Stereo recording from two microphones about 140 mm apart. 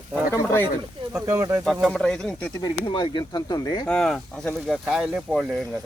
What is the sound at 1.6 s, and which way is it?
Speech, centre (ahead or behind).